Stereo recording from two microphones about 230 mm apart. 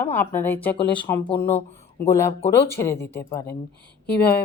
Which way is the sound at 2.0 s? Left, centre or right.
Centre.